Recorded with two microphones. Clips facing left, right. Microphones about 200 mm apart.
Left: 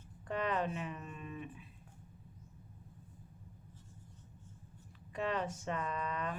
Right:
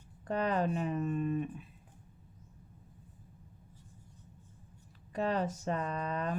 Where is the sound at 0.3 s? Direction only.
40° right (ahead or behind).